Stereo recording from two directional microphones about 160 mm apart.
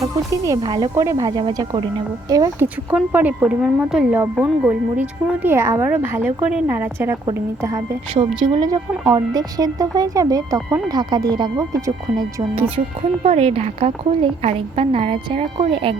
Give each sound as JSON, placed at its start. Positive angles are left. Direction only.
{"t": 0.0, "sound": "speech", "side_deg": -20}
{"t": 2.3, "sound": "speech", "side_deg": -20}
{"t": 13.2, "sound": "a woman's voice", "side_deg": -40}